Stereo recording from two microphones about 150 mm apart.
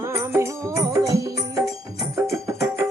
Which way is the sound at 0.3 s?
20° right (ahead or behind).